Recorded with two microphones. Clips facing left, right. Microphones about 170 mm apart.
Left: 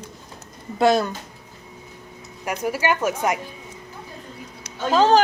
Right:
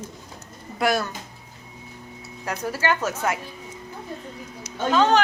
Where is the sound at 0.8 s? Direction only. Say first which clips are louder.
Left 5 dB; 20° left (ahead or behind).